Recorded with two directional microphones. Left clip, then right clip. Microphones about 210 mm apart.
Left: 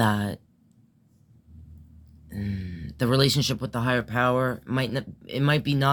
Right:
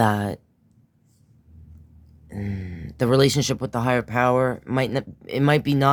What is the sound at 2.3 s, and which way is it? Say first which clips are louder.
Speech: right 2 dB; 40° right (ahead or behind).